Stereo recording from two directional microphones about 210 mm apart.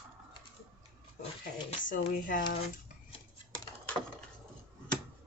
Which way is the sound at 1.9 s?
40° left (ahead or behind).